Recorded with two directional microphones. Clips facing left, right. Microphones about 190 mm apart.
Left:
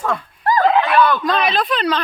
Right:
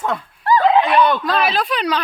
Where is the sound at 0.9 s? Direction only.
20° right (ahead or behind).